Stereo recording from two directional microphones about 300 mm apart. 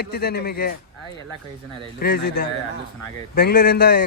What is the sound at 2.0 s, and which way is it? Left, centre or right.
A man's voice, left.